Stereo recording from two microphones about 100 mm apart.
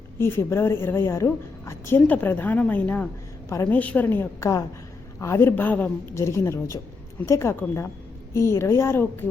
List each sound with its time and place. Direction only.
0.2 s a woman's voice: 25° left (ahead or behind)
2.0 s a woman's voice: 15° left (ahead or behind)
4.4 s a woman's voice: 35° left (ahead or behind); by 5.9 s 15° left (ahead or behind)
6.1 s a woman's voice: 30° left (ahead or behind)